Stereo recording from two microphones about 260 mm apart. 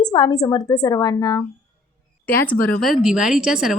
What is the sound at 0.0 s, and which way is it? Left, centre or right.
A woman's voice, centre.